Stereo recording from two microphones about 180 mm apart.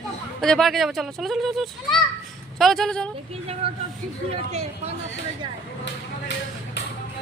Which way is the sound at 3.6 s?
30° right (ahead or behind).